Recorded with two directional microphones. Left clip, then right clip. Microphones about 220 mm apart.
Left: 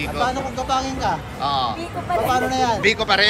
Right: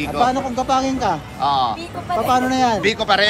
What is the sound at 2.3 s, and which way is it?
Speech, 30° right (ahead or behind).